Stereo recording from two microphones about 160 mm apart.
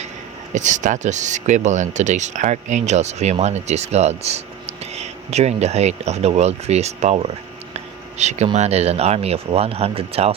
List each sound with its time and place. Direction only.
0.5 s speech: 50° right (ahead or behind)